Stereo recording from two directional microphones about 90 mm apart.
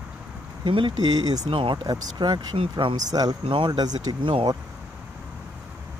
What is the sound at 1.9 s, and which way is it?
Speech, 55° right (ahead or behind).